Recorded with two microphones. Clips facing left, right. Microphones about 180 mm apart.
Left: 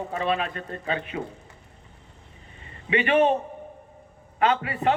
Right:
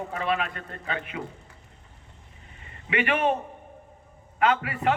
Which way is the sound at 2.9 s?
25° left (ahead or behind).